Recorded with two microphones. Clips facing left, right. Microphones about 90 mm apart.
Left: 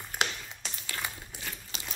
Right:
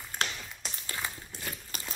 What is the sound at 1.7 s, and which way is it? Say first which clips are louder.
Crunch: even; 45° right (ahead or behind).